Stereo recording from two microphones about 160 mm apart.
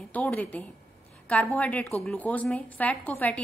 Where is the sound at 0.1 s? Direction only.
10° left (ahead or behind).